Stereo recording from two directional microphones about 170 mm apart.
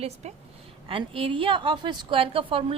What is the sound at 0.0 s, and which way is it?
A woman's voice, 40° right (ahead or behind).